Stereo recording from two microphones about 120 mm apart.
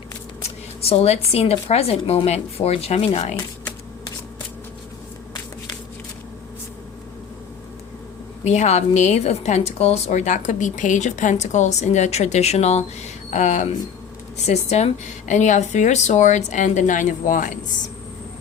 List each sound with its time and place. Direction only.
0.4 s speech: 60° left (ahead or behind)
8.4 s a woman's voice: 75° left (ahead or behind)
14.4 s speech: 65° left (ahead or behind); by 17.6 s 90° left